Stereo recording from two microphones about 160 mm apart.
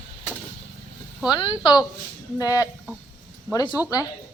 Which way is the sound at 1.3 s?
25° left (ahead or behind).